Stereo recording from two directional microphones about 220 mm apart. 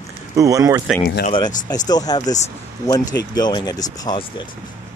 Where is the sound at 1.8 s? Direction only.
20° left (ahead or behind).